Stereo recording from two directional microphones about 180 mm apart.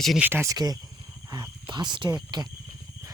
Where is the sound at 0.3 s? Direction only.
15° right (ahead or behind).